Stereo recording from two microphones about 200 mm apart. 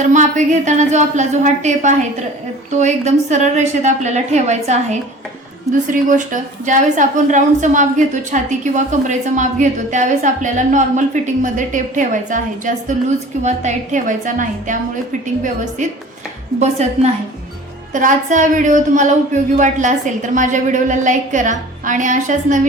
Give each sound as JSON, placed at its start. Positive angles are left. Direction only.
{"t": 0.0, "sound": "a woman's voice", "side_deg": -40}
{"t": 15.8, "sound": "a woman's voice", "side_deg": -40}